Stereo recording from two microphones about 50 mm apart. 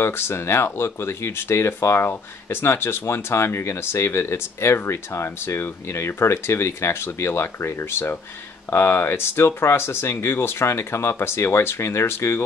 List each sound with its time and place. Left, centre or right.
0.0 s speech: left